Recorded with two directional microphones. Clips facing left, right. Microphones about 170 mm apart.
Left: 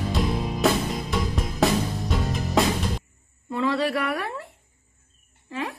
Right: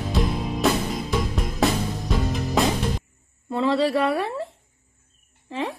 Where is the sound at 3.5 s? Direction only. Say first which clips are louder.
Right 3 dB; 30° right (ahead or behind).